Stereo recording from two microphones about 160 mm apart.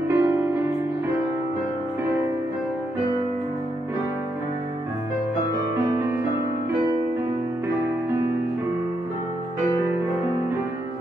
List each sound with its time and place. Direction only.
0.1 s music: 15° right (ahead or behind)